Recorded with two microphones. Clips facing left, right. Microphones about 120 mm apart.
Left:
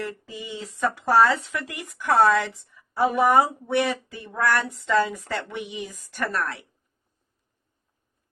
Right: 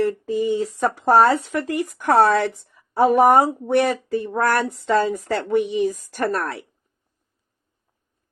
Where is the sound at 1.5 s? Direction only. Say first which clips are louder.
Right 9 dB; 50° right (ahead or behind).